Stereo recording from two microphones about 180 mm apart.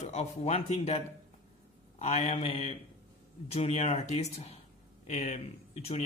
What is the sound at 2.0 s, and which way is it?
A man's voice, 35° left (ahead or behind).